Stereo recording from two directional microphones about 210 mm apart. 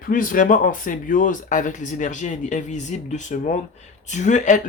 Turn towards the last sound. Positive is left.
turn(degrees=35)  # may be behind; listen again after turning